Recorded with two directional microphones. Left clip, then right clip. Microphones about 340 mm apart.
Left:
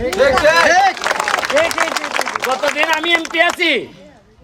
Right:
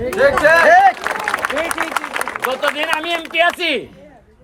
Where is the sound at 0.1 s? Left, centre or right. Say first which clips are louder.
Even; centre.